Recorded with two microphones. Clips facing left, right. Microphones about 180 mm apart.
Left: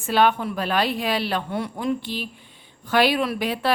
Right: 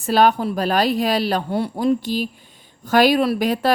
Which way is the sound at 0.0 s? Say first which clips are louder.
Right 3 dB; 40° right (ahead or behind).